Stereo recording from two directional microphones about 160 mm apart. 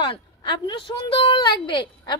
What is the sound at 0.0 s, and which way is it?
A woman's voice, 30° left (ahead or behind).